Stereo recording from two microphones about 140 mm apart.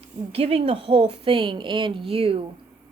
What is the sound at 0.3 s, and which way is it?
A woman's voice, 45° right (ahead or behind).